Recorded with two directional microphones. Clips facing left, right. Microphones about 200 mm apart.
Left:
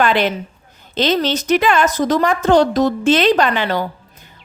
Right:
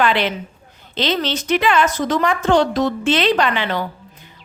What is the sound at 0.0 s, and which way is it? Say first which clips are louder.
A woman's voice: left 2 dB; 45° left (ahead or behind).